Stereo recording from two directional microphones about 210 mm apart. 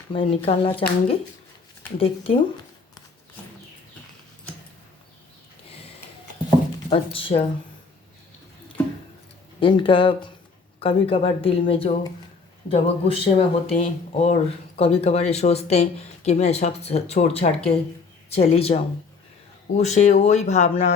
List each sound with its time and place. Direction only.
0.1 s speech: 25° left (ahead or behind)
6.9 s speech: 25° left (ahead or behind)
9.6 s speech: 25° left (ahead or behind)